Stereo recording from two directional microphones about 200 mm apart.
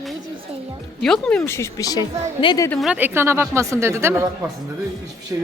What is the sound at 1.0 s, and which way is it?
A woman's voice, centre (ahead or behind).